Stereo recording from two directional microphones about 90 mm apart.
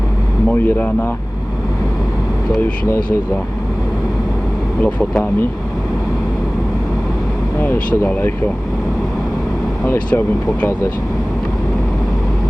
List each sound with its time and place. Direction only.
0.4 s speech: 20° left (ahead or behind)
4.8 s speech: 15° left (ahead or behind)
7.6 s speech: 20° left (ahead or behind)
10.1 s speech: 20° left (ahead or behind)